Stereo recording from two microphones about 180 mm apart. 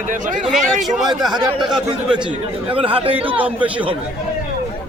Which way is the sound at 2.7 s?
30° right (ahead or behind).